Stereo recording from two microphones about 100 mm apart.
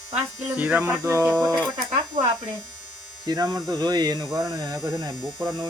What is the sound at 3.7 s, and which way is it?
Speech, 45° right (ahead or behind).